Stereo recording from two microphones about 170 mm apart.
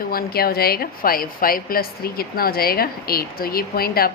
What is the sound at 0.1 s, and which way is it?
A woman's voice, 60° left (ahead or behind).